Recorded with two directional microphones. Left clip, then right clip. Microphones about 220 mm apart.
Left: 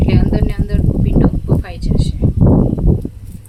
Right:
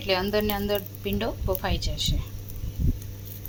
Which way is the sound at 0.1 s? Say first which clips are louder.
Left 4 dB; 15° right (ahead or behind).